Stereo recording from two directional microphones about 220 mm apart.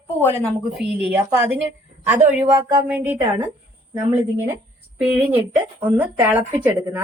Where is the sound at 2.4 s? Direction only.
20° right (ahead or behind).